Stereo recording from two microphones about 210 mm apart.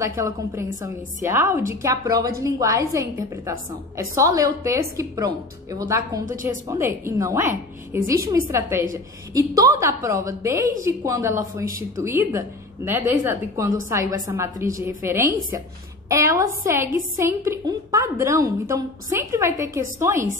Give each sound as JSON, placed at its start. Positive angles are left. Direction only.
{"t": 0.0, "sound": "a woman's voice", "side_deg": -15}